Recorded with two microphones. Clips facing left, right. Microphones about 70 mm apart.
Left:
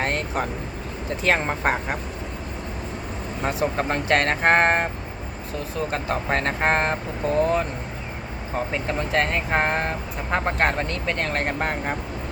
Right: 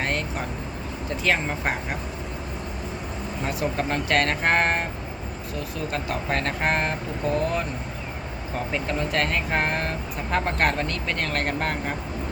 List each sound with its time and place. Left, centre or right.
0.0 s vehicle: left
1.2 s speech: left
3.4 s speech: left
8.7 s speech: left